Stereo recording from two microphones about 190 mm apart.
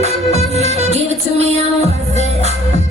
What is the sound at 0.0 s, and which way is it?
Music, 35° right (ahead or behind).